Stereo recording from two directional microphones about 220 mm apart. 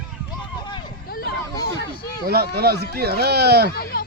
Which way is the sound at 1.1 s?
45° left (ahead or behind).